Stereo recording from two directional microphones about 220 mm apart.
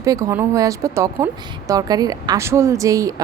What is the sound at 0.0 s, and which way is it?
Speech, 15° right (ahead or behind).